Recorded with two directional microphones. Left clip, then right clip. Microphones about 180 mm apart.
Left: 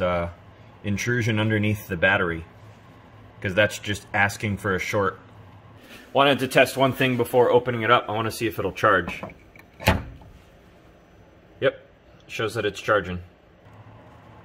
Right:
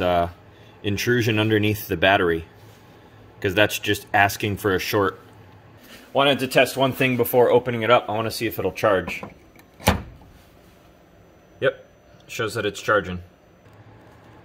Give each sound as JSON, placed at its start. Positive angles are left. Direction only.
{"t": 0.0, "sound": "speech", "side_deg": -55}
{"t": 3.4, "sound": "speech", "side_deg": -55}
{"t": 6.1, "sound": "speech", "side_deg": 5}
{"t": 7.2, "sound": "speech", "side_deg": -20}
{"t": 12.3, "sound": "speech", "side_deg": -10}